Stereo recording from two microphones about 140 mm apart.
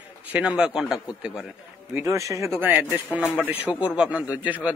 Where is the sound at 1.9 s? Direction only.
20° right (ahead or behind).